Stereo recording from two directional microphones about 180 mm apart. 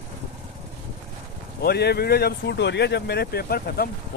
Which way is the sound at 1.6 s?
60° left (ahead or behind).